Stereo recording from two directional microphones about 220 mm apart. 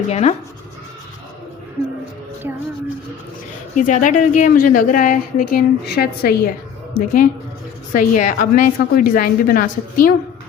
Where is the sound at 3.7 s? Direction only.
35° left (ahead or behind).